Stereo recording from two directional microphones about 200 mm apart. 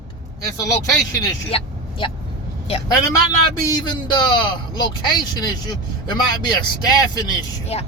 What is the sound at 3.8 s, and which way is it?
Speech, 20° left (ahead or behind).